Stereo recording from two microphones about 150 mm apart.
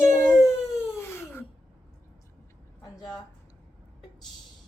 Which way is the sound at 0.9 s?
15° left (ahead or behind).